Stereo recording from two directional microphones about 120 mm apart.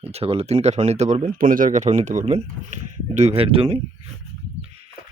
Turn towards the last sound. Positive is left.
turn(degrees=-50)  # may be behind; listen again after turning